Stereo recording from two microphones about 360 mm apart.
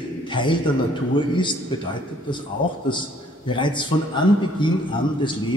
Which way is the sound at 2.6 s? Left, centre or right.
Centre.